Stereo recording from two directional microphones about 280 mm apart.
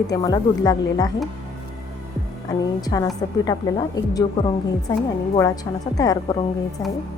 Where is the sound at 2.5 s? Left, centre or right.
Centre.